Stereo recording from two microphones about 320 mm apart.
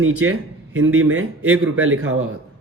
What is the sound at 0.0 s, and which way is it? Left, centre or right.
A man's voice, right.